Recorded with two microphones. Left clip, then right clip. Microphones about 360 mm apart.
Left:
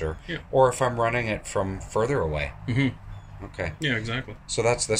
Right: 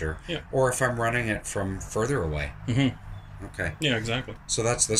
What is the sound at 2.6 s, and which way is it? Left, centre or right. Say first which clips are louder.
Speech: even; centre.